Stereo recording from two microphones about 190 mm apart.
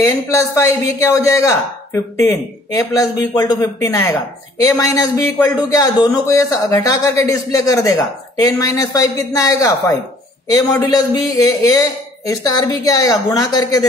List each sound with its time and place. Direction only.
0.0 s a woman's voice: 15° left (ahead or behind)